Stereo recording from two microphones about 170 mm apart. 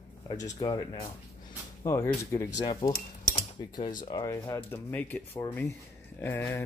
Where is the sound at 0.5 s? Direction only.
25° left (ahead or behind).